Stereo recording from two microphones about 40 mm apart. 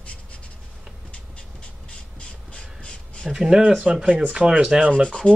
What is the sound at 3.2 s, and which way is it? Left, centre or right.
Speech, centre.